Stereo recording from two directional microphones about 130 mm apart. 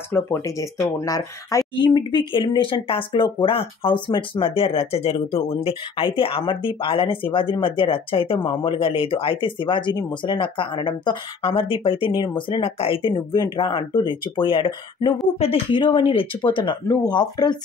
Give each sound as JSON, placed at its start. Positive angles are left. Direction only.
{"t": 0.1, "sound": "speech", "side_deg": 20}
{"t": 2.0, "sound": "speech", "side_deg": 35}